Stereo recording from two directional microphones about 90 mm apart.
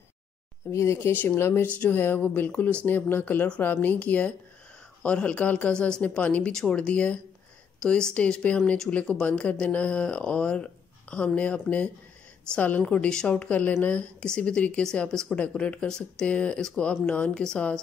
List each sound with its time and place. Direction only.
0.7 s speech: 30° left (ahead or behind); by 17.7 s 10° left (ahead or behind)